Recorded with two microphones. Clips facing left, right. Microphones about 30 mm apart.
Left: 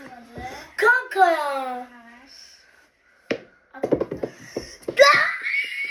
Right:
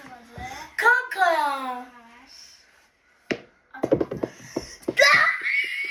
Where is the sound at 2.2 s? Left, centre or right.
Left.